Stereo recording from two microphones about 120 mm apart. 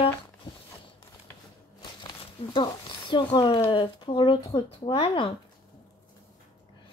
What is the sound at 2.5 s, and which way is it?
Speech, 40° left (ahead or behind).